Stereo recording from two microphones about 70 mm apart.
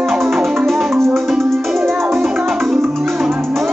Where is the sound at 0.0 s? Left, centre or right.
Centre.